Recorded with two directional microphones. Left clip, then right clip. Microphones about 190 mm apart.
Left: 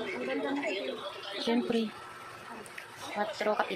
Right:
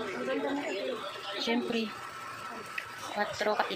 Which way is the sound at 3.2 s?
15° left (ahead or behind).